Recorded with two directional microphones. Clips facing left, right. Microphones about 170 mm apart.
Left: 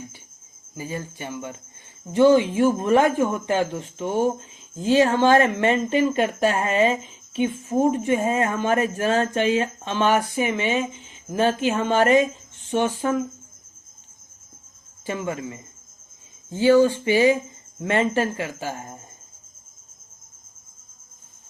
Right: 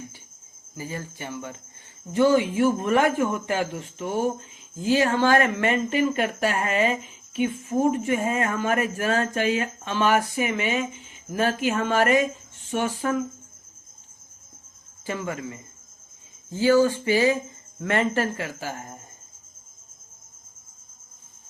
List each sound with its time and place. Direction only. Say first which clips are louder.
0.8 s speech: left 2 dB; 20° left (ahead or behind)
15.0 s speech: left 2 dB; 20° left (ahead or behind)